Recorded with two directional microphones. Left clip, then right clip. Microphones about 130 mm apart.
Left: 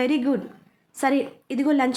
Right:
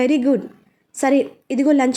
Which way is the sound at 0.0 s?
25° right (ahead or behind).